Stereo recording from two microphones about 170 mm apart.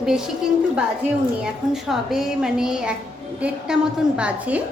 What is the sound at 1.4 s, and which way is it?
A woman's voice, centre (ahead or behind).